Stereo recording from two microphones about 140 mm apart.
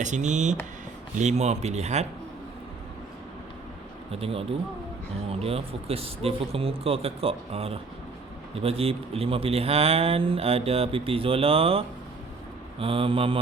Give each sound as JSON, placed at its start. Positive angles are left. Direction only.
{"t": 0.0, "sound": "a man's voice", "side_deg": -60}
{"t": 4.1, "sound": "a man's voice", "side_deg": -45}
{"t": 12.8, "sound": "mantra", "side_deg": -40}